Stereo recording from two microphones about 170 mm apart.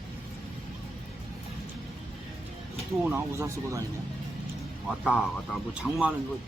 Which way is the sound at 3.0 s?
15° right (ahead or behind).